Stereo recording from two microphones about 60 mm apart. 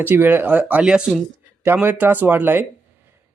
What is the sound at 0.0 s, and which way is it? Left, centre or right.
Speech, right.